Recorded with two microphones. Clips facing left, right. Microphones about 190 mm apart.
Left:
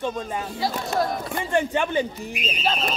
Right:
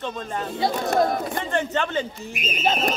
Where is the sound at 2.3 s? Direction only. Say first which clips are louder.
Even; 45° right (ahead or behind).